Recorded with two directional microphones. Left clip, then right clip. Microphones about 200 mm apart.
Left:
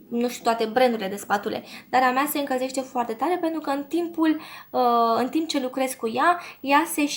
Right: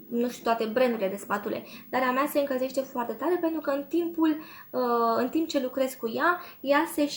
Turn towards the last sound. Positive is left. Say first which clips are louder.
# left 3 dB
turn(degrees=40)  # may be behind; listen again after turning